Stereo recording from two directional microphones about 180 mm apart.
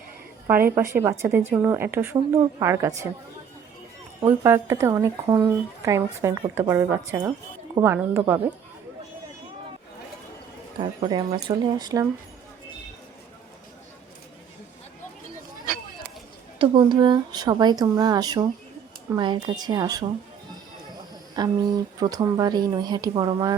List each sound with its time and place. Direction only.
0.8 s a woman's voice: 15° right (ahead or behind)
4.2 s a woman's voice: 15° right (ahead or behind)
10.8 s speech: 25° right (ahead or behind)
16.6 s speech: 25° right (ahead or behind)
21.4 s speech: 20° right (ahead or behind)